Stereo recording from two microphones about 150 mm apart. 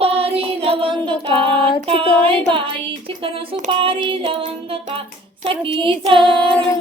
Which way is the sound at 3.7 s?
35° right (ahead or behind).